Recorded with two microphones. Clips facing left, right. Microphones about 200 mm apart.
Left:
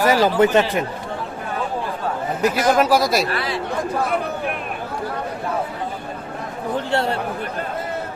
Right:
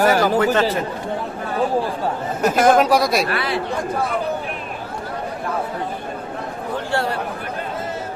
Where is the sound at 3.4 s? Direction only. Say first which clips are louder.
Right 2 dB; 60° right (ahead or behind).